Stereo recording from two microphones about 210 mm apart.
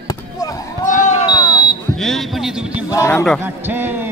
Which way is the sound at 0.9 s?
35° left (ahead or behind).